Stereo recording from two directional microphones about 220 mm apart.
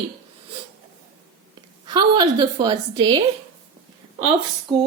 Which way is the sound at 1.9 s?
20° right (ahead or behind).